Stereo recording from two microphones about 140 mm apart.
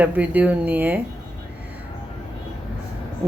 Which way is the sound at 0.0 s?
10° right (ahead or behind).